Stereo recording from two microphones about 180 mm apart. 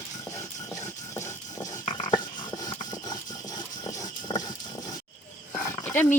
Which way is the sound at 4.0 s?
20° left (ahead or behind).